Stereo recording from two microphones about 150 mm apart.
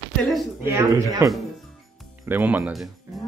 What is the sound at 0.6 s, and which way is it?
Speech, 20° right (ahead or behind).